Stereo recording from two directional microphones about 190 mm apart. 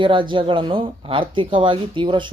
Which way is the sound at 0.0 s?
25° right (ahead or behind).